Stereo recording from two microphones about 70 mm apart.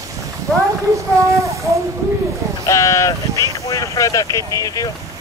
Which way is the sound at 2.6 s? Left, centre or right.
Left.